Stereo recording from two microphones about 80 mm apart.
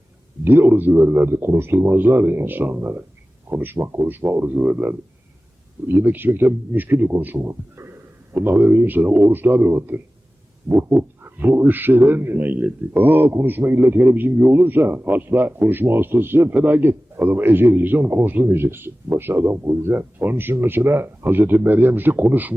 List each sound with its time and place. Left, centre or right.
0.4 s a man's voice: right
11.2 s a man's voice: right